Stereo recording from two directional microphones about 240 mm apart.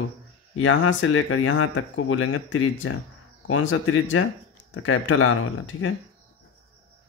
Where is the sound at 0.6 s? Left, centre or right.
Left.